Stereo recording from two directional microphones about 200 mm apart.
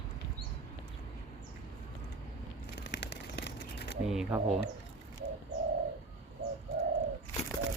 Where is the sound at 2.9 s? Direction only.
60° left (ahead or behind).